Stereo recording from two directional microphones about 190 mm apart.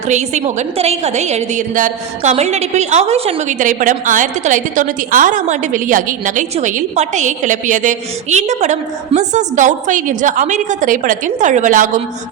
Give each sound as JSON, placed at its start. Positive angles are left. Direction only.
{"t": 0.1, "sound": "a woman's voice", "side_deg": -40}